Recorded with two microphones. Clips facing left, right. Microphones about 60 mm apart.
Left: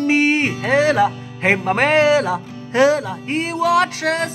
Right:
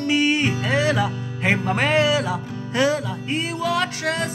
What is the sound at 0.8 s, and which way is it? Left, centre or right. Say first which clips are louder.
Speech: left 6 dB; left.